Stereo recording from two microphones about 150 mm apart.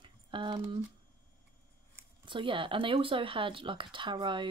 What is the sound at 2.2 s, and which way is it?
Speech, 35° right (ahead or behind).